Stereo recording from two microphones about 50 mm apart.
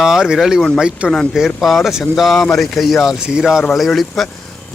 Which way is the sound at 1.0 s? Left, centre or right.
Right.